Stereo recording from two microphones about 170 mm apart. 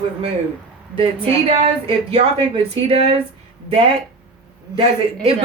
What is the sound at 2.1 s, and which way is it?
Speech, 35° right (ahead or behind).